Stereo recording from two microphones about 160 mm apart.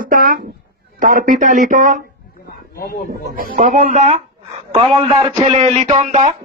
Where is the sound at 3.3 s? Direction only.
55° right (ahead or behind).